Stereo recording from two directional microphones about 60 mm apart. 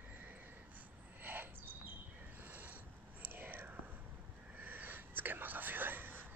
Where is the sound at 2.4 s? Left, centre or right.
Right.